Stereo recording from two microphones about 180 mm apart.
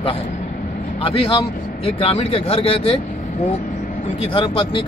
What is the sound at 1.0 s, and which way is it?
Speech, 30° left (ahead or behind).